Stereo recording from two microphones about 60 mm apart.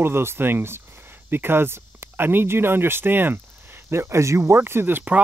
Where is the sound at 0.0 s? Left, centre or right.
Right.